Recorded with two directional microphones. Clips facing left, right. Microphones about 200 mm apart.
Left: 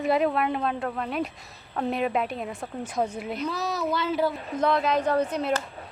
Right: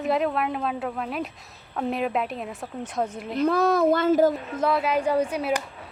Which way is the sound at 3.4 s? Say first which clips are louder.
Right 10 dB; 55° right (ahead or behind).